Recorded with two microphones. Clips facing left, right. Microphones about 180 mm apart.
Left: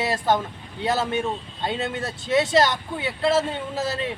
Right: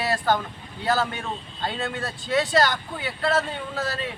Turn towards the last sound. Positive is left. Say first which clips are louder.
# left 3 dB
turn(degrees=20)  # may be behind; listen again after turning